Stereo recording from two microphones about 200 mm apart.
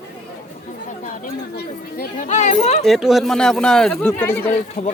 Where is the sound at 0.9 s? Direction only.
40° left (ahead or behind).